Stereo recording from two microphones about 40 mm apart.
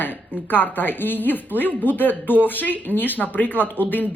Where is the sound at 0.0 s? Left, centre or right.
Left.